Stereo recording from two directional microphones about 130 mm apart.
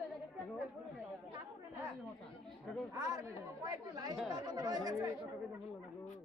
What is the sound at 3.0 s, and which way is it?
Speech, 25° right (ahead or behind).